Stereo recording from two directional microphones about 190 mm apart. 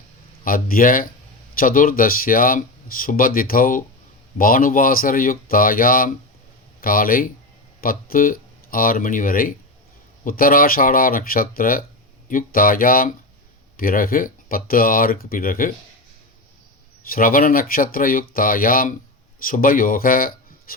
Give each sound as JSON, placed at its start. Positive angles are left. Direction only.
{"t": 0.4, "sound": "speech", "side_deg": 50}
{"t": 17.1, "sound": "speech", "side_deg": 50}